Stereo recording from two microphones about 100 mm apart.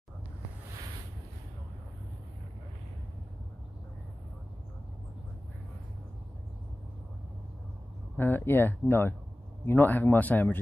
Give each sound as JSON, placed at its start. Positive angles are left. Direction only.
{"t": 8.2, "sound": "speech", "side_deg": 20}